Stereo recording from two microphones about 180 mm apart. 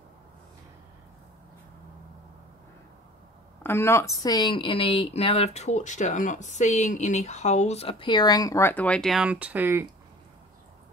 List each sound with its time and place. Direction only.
3.6 s a woman's voice: 15° left (ahead or behind); by 9.8 s 10° right (ahead or behind)